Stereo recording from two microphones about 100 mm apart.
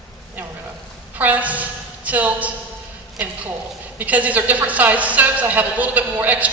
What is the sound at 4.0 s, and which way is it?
A woman's voice, 15° right (ahead or behind).